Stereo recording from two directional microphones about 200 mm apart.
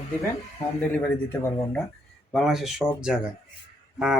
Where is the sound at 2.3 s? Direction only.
Centre (ahead or behind).